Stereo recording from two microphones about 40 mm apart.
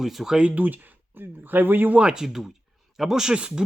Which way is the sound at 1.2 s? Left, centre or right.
Right.